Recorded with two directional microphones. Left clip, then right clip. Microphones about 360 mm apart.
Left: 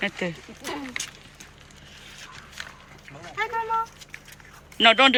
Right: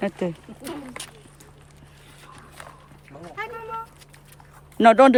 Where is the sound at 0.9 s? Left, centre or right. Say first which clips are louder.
Left 5 dB; centre.